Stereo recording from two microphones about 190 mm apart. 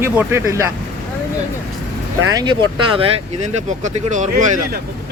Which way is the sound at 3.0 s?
35° right (ahead or behind).